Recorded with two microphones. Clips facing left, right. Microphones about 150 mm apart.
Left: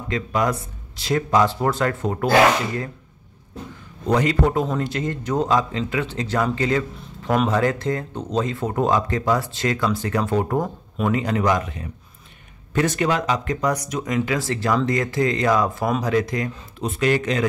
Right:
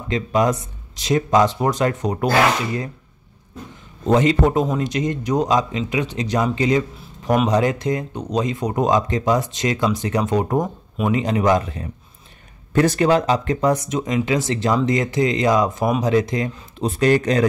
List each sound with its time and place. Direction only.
0.1 s speech: 20° right (ahead or behind)
4.0 s speech: 20° right (ahead or behind)
16.8 s speech: 35° right (ahead or behind)